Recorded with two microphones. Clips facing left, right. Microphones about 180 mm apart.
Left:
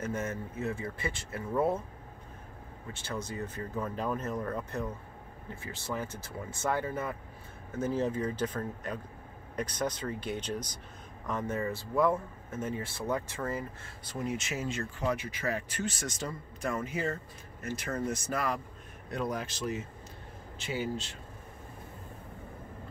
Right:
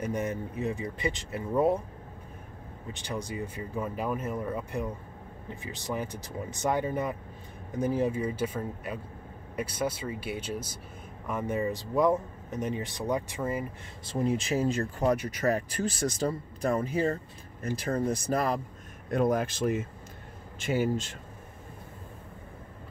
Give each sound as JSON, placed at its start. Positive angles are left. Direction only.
{"t": 0.0, "sound": "speech", "side_deg": -15}
{"t": 2.9, "sound": "speech", "side_deg": -15}
{"t": 14.0, "sound": "speech", "side_deg": -30}
{"t": 19.0, "sound": "speech", "side_deg": -50}